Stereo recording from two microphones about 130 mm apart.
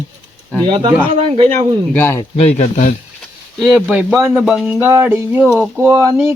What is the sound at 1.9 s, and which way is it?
Speech, 15° left (ahead or behind).